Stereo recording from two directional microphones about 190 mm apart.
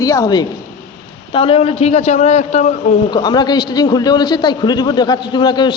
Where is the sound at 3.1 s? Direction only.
20° left (ahead or behind).